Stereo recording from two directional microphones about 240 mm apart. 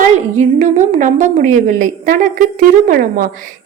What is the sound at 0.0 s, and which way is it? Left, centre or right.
A woman's voice, right.